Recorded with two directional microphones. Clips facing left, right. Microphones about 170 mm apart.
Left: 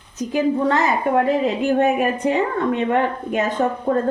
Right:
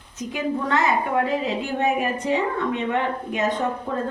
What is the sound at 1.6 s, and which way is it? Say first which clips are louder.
A woman's voice: left 6 dB; 55° left (ahead or behind).